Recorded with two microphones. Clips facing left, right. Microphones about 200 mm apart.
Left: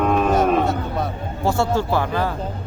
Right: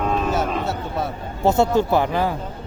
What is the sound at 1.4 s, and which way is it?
Speech, 20° right (ahead or behind).